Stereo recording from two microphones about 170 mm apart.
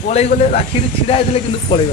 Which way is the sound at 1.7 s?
35° left (ahead or behind).